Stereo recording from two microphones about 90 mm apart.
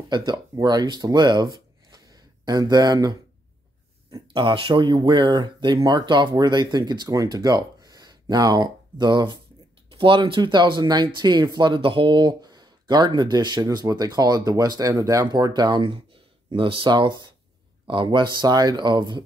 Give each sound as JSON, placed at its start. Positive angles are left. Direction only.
{"t": 0.1, "sound": "speech", "side_deg": -50}
{"t": 4.3, "sound": "speech", "side_deg": -70}
{"t": 9.9, "sound": "speech", "side_deg": -65}
{"t": 16.5, "sound": "speech", "side_deg": -70}